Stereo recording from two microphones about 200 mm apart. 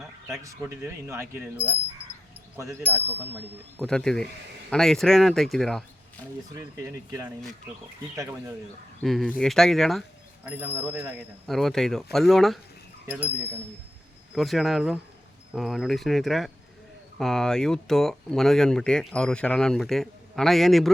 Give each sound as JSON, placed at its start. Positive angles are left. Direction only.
{"t": 0.3, "sound": "speech", "side_deg": -15}
{"t": 3.8, "sound": "speech", "side_deg": 5}
{"t": 6.5, "sound": "speech", "side_deg": -15}
{"t": 9.0, "sound": "speech", "side_deg": 5}
{"t": 10.4, "sound": "speech", "side_deg": -10}
{"t": 11.4, "sound": "speech", "side_deg": 0}
{"t": 14.3, "sound": "speech", "side_deg": 0}